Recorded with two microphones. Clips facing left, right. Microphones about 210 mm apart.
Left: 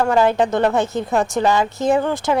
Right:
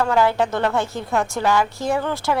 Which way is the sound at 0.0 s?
20° left (ahead or behind).